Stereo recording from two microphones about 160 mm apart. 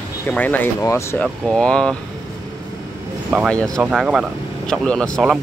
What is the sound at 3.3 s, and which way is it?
Speech, 5° left (ahead or behind).